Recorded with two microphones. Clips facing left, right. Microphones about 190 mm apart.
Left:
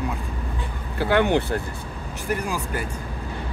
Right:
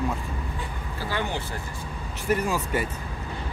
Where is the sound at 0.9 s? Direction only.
65° left (ahead or behind).